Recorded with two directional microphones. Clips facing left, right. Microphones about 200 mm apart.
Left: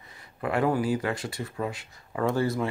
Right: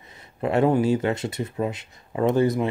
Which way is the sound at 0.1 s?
25° right (ahead or behind).